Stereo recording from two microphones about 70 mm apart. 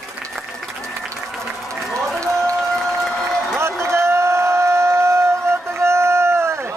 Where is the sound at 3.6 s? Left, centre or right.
Right.